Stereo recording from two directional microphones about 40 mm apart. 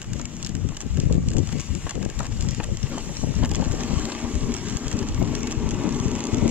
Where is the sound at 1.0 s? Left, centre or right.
Right.